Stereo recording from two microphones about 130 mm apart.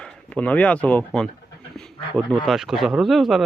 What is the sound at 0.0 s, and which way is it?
Speech, 10° left (ahead or behind).